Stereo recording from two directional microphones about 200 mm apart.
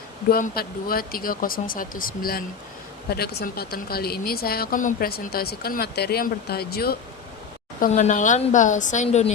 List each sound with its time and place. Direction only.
0.3 s speech: 45° left (ahead or behind)
7.8 s a woman's voice: 35° left (ahead or behind)